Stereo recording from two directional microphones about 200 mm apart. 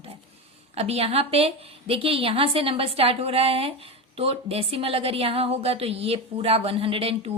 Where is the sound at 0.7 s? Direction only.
30° right (ahead or behind).